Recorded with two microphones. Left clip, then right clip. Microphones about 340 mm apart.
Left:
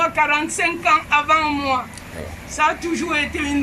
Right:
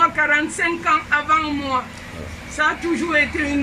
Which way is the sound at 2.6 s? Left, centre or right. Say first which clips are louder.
Even; centre.